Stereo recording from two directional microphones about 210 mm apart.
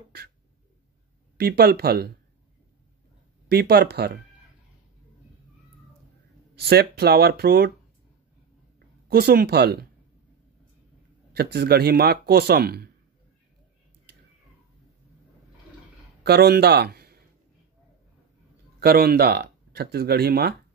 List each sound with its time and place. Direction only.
1.4 s speech: 50° right (ahead or behind)
3.4 s speech: 45° right (ahead or behind)
6.5 s speech: 50° right (ahead or behind)
8.7 s a woman's voice: 45° right (ahead or behind)
11.3 s speech: 50° right (ahead or behind)
16.3 s a man's voice: 50° right (ahead or behind)
18.8 s speech: 45° right (ahead or behind)